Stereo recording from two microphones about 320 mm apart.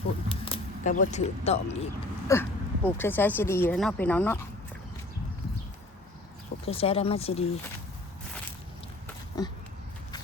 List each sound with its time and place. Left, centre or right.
0.3 s a sound: centre
2.3 s speech: centre
6.7 s speech: centre
9.4 s speech: centre